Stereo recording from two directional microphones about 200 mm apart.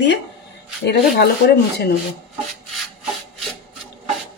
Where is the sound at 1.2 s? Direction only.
55° left (ahead or behind).